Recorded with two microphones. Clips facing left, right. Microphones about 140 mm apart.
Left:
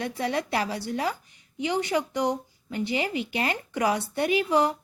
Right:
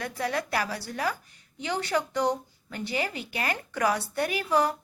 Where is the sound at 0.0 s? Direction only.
25° left (ahead or behind).